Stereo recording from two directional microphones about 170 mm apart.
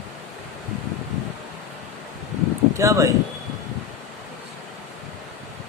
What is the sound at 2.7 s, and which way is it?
Speech, 20° right (ahead or behind).